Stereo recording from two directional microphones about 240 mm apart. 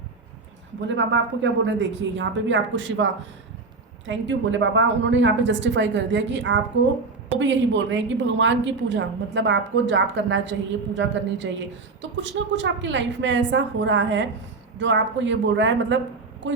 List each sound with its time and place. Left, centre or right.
0.9 s a woman's voice: right